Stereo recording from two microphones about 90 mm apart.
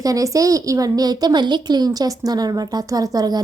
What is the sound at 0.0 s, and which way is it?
A woman's voice, 40° right (ahead or behind).